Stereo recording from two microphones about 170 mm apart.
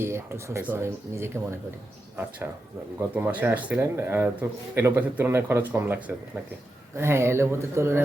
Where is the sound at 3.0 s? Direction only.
10° right (ahead or behind).